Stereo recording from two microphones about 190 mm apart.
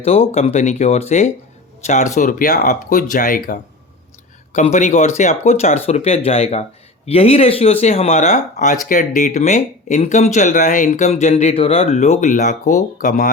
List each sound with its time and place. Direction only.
0.0 s speech: 30° left (ahead or behind)